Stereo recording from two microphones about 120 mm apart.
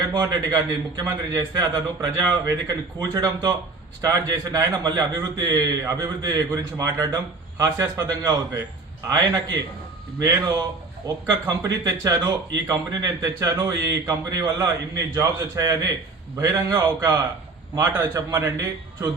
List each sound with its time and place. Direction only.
0.1 s a man's voice: 35° right (ahead or behind)